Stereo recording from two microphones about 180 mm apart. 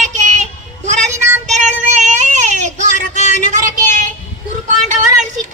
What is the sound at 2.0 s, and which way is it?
Speech, 40° right (ahead or behind).